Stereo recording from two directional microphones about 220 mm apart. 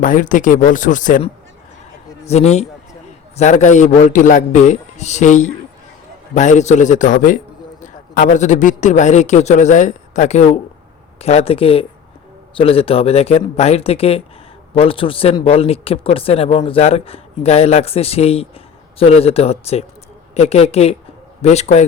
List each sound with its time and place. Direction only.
0.0 s speech: 35° left (ahead or behind)